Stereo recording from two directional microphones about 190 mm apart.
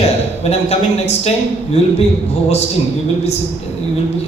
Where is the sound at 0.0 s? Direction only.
35° left (ahead or behind).